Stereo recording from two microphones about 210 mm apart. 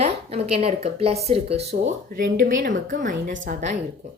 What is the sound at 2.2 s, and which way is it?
Speech, 40° right (ahead or behind).